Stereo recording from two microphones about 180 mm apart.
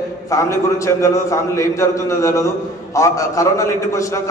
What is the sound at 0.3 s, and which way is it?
A man's voice, 15° left (ahead or behind).